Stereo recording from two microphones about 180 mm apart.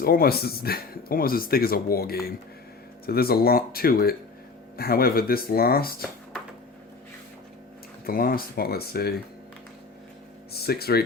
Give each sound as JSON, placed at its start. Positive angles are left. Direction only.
{"t": 0.0, "sound": "speech", "side_deg": 55}
{"t": 8.0, "sound": "speech", "side_deg": 55}
{"t": 10.5, "sound": "speech", "side_deg": 60}